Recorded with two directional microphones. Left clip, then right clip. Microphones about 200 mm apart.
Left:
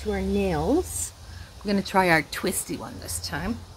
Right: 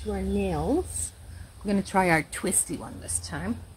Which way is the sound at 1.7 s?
5° right (ahead or behind).